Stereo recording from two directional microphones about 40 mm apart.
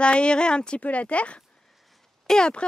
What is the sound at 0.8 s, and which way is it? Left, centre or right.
Speech, left.